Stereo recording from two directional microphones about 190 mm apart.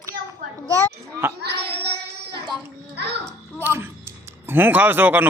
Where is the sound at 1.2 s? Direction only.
10° right (ahead or behind).